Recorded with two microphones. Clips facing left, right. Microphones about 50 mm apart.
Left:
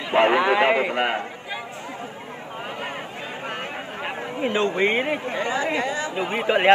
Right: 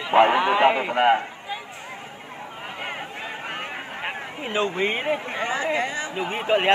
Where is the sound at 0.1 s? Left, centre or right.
Centre.